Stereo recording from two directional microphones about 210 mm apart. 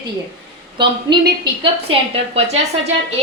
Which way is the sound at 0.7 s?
20° right (ahead or behind).